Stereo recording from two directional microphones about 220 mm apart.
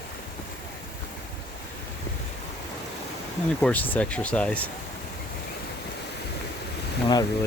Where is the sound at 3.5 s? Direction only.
5° left (ahead or behind).